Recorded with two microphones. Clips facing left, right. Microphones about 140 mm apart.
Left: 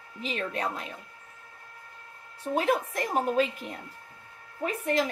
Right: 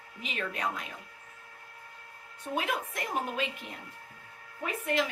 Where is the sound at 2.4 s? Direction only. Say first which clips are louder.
Left 6 dB; 35° left (ahead or behind).